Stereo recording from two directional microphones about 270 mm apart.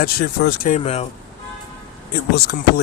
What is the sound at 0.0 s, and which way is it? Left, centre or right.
Speech, left.